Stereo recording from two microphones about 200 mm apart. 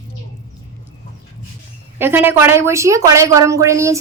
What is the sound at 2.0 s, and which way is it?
A woman's voice, 10° right (ahead or behind).